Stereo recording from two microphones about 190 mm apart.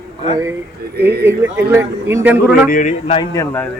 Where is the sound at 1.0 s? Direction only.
60° right (ahead or behind).